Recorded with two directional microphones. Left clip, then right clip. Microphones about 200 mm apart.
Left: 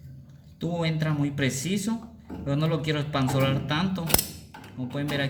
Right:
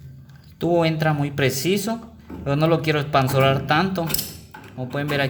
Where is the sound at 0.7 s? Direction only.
50° right (ahead or behind).